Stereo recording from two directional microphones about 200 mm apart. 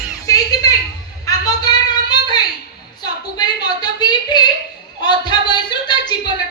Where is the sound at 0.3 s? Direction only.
15° left (ahead or behind).